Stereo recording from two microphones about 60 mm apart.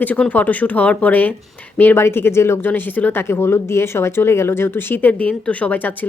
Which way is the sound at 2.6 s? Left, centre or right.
Left.